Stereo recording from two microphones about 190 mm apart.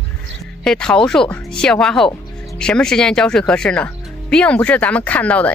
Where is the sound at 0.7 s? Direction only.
5° left (ahead or behind).